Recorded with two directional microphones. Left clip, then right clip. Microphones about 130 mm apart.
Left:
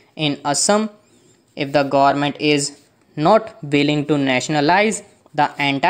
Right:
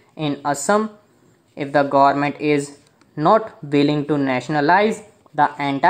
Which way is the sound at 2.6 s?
15° left (ahead or behind).